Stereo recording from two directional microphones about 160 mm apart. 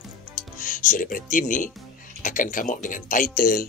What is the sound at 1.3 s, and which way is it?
Speech, 55° left (ahead or behind).